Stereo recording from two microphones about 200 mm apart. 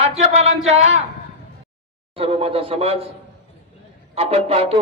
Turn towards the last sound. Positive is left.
turn(degrees=-30)  # may be behind; listen again after turning